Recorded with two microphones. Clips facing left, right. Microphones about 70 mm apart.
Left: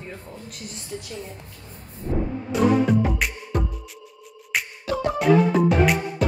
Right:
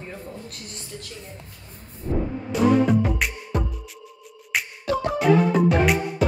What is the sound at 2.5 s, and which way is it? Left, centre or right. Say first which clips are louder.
Music: even; centre.